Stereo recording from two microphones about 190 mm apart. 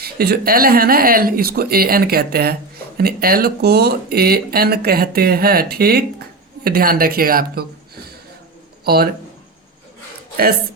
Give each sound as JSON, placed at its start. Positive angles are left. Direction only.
{"t": 0.0, "sound": "a woman's voice", "side_deg": -55}